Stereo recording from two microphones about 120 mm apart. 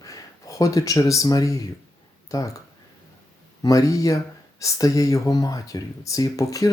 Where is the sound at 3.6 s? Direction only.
30° left (ahead or behind).